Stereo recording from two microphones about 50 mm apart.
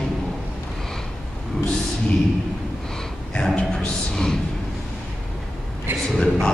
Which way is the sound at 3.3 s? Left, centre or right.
Centre.